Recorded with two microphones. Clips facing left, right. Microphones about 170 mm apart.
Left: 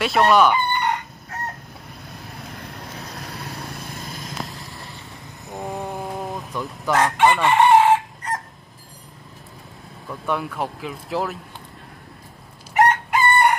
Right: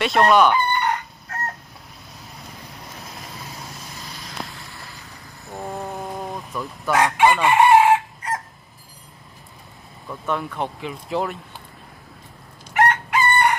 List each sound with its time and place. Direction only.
0.0 s chicken: centre (ahead or behind)
2.0 s vehicle: centre (ahead or behind)
3.4 s vehicle: 60° left (ahead or behind)
4.2 s vehicle: centre (ahead or behind)
5.5 s chicken: centre (ahead or behind)
10.2 s speech: 5° left (ahead or behind)
12.7 s chicken: centre (ahead or behind)